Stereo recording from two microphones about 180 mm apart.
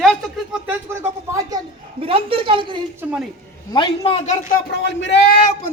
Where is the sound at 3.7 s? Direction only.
25° left (ahead or behind).